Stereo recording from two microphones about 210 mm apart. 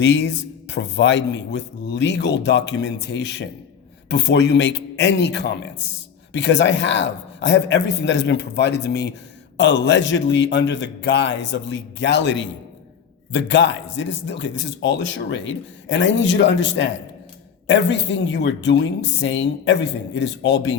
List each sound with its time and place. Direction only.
0.0 s a man's voice: 55° left (ahead or behind)